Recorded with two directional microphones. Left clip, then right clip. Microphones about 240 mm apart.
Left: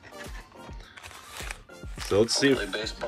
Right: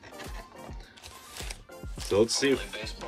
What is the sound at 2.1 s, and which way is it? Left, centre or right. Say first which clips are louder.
Speech: left 2 dB; centre.